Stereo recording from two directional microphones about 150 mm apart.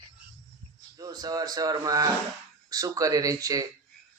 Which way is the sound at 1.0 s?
25° right (ahead or behind).